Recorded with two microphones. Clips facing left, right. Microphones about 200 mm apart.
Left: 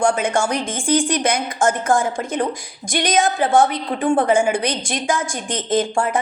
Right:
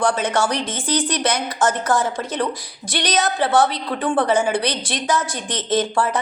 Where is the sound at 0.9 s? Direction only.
50° left (ahead or behind).